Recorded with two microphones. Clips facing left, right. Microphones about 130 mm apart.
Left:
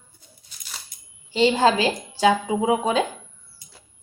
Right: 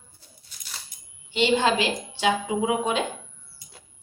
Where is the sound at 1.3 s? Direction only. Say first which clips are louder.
Left 3 dB; 35° left (ahead or behind).